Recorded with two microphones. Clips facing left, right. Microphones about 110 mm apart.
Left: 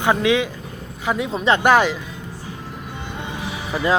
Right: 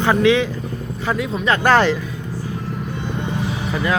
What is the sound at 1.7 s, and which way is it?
Speech, 10° left (ahead or behind).